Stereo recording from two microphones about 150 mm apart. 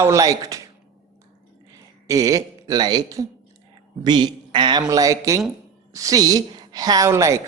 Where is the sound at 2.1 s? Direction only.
25° right (ahead or behind).